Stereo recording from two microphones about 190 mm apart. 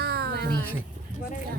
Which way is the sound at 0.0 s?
55° right (ahead or behind).